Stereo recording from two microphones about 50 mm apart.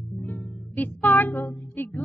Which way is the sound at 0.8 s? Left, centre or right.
Left.